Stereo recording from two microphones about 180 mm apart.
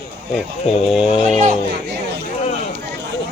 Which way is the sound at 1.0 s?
30° left (ahead or behind).